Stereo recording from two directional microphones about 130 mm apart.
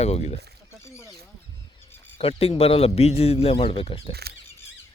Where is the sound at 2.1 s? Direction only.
50° left (ahead or behind).